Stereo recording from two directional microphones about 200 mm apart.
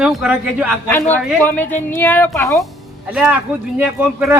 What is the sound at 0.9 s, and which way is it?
A man's voice, 10° left (ahead or behind).